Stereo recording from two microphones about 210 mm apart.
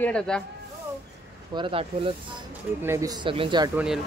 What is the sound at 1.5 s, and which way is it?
Speech, 25° right (ahead or behind).